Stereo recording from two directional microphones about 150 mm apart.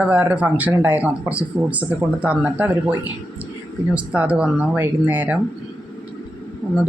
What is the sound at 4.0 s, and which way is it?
Speech, 10° right (ahead or behind).